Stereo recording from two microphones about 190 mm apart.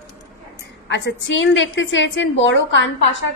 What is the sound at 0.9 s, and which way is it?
A woman's voice, 70° left (ahead or behind).